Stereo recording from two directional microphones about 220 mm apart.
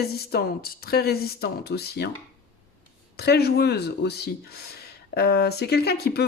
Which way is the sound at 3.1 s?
45° left (ahead or behind).